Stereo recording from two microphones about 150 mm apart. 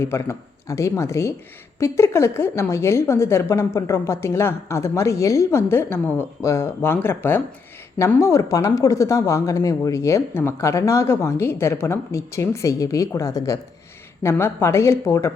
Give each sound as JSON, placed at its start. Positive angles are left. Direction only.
{"t": 0.0, "sound": "a woman's voice", "side_deg": 15}